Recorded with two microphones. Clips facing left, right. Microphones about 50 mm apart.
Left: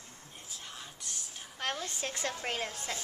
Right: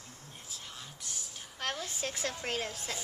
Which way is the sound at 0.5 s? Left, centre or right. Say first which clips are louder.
Left 1 dB; centre.